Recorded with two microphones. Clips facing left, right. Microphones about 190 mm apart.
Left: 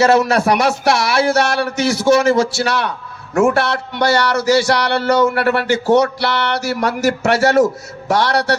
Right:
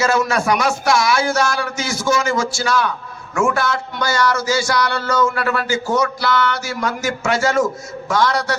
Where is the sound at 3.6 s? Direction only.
65° left (ahead or behind).